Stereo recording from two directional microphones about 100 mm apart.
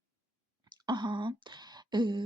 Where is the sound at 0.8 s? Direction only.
50° right (ahead or behind).